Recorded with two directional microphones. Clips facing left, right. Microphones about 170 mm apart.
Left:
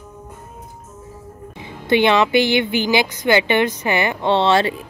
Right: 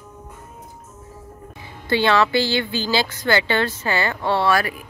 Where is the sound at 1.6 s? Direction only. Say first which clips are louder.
Left 5 dB; 20° left (ahead or behind).